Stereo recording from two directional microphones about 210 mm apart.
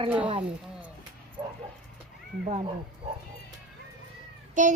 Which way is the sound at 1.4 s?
20° right (ahead or behind).